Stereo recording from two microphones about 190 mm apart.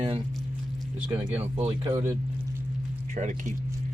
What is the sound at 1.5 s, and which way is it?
Speech, 35° right (ahead or behind).